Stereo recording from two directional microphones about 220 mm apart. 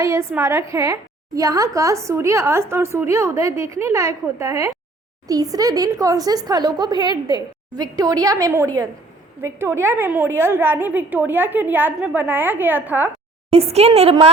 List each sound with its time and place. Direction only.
0.0 s a woman's voice: 15° right (ahead or behind)
13.5 s speech: 25° right (ahead or behind)